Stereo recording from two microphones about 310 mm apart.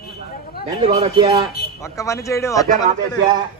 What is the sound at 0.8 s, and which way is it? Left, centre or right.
Speech, centre.